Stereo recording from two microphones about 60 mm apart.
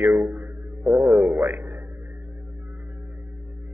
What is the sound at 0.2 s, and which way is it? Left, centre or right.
Music, right.